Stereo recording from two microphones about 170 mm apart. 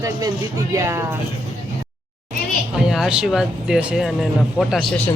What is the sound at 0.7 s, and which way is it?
Speech, 15° right (ahead or behind).